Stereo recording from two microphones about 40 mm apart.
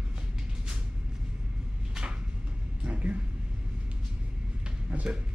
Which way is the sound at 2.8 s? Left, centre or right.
Right.